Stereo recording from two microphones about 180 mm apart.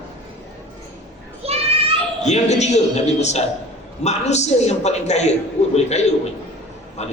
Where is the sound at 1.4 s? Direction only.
35° right (ahead or behind).